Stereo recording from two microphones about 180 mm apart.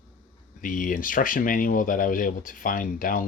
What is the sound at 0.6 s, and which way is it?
Speech, 50° left (ahead or behind).